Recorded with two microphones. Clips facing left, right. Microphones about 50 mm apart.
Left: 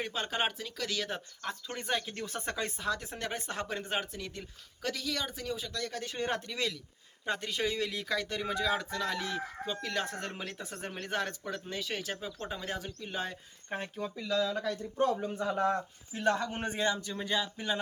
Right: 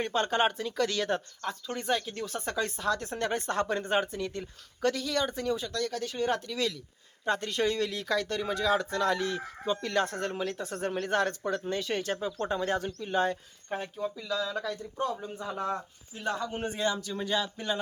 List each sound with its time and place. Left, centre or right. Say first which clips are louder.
0.0 s speech: right 6 dB; centre
1.5 s speech: right 4 dB; centre
2.8 s speech: right 5 dB; centre
5.7 s speech: right 5 dB; centre
7.3 s speech: right 4 dB; centre
10.8 s speech: right 7 dB; centre
13.8 s speech: right 3 dB; left
15.4 s a man's voice: left 3 dB; left
16.7 s speech: even; centre